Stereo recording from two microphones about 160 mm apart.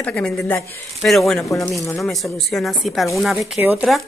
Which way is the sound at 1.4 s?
20° left (ahead or behind).